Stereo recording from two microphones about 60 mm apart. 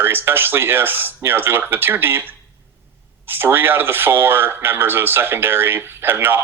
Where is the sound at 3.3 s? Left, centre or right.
Right.